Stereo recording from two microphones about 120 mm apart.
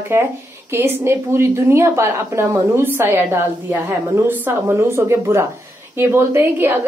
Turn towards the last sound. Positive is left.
turn(degrees=-20)  # may be behind; listen again after turning